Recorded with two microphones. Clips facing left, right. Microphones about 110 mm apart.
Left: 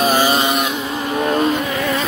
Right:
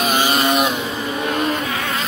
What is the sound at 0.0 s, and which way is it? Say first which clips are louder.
Vehicle: left 2 dB; 35° left (ahead or behind).